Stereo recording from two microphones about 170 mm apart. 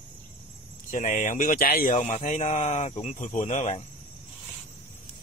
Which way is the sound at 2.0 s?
45° left (ahead or behind).